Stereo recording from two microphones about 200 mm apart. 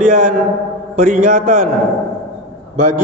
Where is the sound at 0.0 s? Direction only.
35° right (ahead or behind).